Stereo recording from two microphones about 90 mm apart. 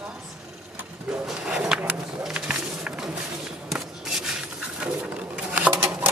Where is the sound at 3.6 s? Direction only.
5° right (ahead or behind).